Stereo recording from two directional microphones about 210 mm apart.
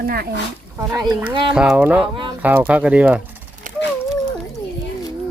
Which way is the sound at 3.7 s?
40° right (ahead or behind).